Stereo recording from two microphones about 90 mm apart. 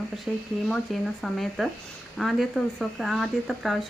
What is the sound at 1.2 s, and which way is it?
Speech, centre (ahead or behind).